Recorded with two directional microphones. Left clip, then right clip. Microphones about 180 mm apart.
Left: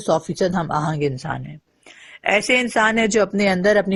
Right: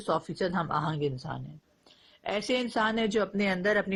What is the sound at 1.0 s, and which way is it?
Speech, 10° left (ahead or behind).